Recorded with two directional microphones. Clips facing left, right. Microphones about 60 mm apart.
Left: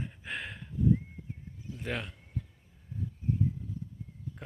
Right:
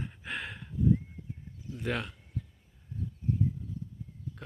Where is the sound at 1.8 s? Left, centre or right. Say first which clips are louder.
Right 3 dB; centre.